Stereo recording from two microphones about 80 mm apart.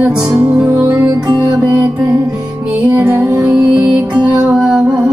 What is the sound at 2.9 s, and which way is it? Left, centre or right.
Music, right.